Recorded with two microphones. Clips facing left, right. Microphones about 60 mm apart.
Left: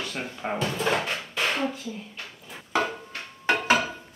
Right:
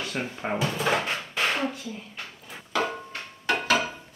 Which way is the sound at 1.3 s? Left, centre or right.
Centre.